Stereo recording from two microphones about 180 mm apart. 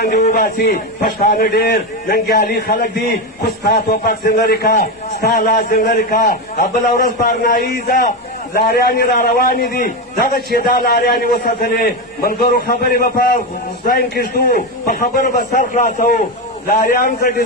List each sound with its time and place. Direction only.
0.0 s a man's voice: 60° left (ahead or behind)